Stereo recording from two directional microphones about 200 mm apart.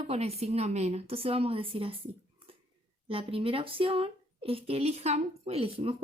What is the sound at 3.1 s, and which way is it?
A woman's voice, 25° right (ahead or behind).